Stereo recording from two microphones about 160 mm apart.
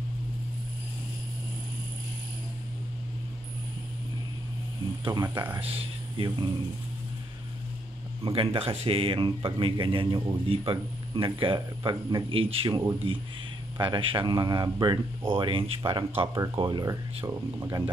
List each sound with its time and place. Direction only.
5.0 s speech: 25° right (ahead or behind)
5.6 s speech: 35° right (ahead or behind)
8.2 s speech: 35° right (ahead or behind)